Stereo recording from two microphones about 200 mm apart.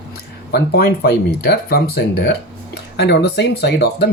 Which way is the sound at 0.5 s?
50° left (ahead or behind).